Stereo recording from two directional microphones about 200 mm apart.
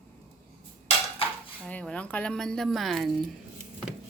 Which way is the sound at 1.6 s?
5° left (ahead or behind).